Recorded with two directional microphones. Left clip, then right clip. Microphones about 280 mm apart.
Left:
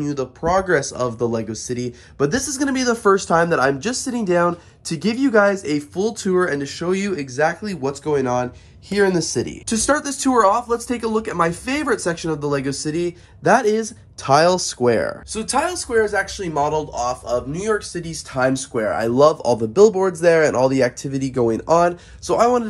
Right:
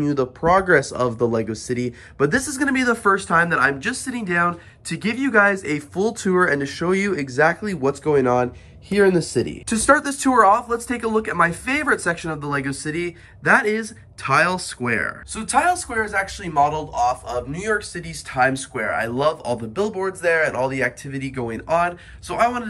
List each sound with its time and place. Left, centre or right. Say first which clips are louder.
0.0 s speech: right 2 dB; centre
16.7 s a man's voice: right 1 dB; centre
17.5 s speech: left 1 dB; centre
17.9 s a man's voice: right 2 dB; centre